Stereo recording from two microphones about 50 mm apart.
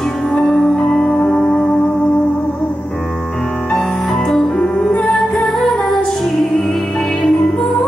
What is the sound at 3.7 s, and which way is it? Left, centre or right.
Music, centre.